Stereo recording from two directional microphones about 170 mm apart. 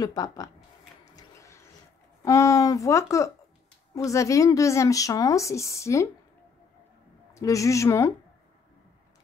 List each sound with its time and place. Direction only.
0.0 s speech: 20° left (ahead or behind)
1.1 s a sound: 15° left (ahead or behind)
2.2 s speech: 20° left (ahead or behind)
7.3 s speech: 20° left (ahead or behind)